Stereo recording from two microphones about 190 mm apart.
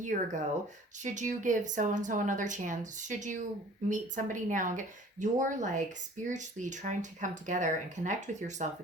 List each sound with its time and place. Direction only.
0.1 s speech: 45° right (ahead or behind)